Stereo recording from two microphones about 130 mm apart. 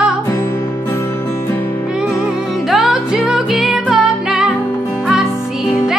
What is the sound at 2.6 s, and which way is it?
Music, centre (ahead or behind).